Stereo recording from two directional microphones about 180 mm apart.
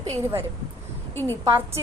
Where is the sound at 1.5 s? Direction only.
15° right (ahead or behind).